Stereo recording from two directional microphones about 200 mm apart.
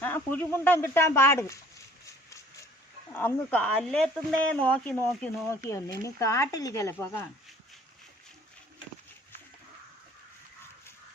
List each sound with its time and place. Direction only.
0.0 s speech: 10° left (ahead or behind)
2.0 s a sound: 15° left (ahead or behind)
3.1 s speech: 10° left (ahead or behind)